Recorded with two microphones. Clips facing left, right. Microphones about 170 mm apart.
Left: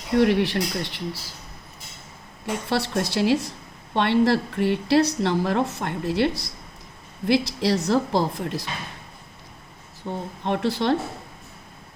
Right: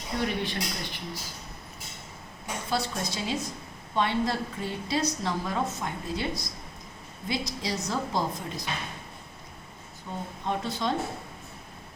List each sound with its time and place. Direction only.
0.1 s a woman's voice: 70° left (ahead or behind)
2.5 s a woman's voice: 70° left (ahead or behind)
10.1 s a woman's voice: 70° left (ahead or behind)